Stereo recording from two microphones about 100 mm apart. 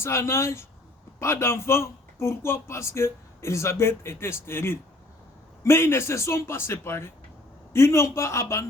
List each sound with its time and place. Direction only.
0.0 s speech: 25° left (ahead or behind)